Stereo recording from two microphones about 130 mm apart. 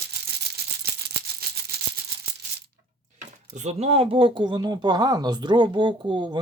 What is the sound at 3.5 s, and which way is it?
Speech, 60° right (ahead or behind).